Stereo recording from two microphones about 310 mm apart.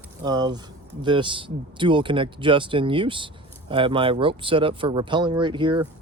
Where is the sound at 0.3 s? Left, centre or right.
Centre.